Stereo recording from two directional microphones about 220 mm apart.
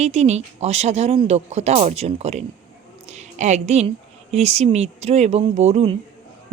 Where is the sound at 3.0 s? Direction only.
30° right (ahead or behind).